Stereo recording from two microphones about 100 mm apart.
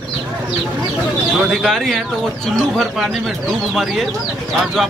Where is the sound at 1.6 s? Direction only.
Centre (ahead or behind).